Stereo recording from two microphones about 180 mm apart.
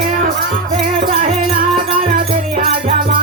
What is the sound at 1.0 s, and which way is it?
Music, 45° right (ahead or behind).